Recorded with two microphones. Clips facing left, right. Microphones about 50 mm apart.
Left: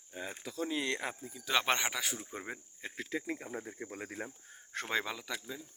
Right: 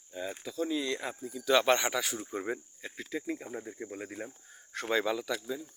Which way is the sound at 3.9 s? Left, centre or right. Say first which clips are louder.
Right 2 dB; left.